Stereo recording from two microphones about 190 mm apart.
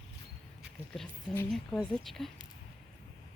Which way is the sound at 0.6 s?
Centre (ahead or behind).